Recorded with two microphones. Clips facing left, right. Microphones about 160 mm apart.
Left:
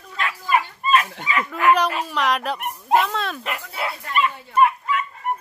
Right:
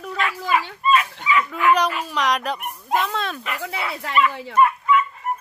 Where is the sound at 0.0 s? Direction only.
90° right.